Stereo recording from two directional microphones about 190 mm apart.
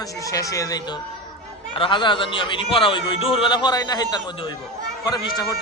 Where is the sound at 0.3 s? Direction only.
15° left (ahead or behind).